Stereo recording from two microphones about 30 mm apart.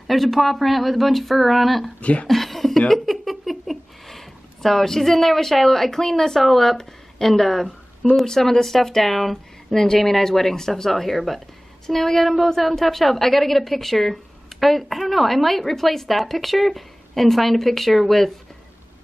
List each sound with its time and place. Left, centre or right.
0.0 s speech: centre
2.0 s speech: left
2.2 s speech: centre
3.1 s a sound: centre
6.4 s a woman's voice: centre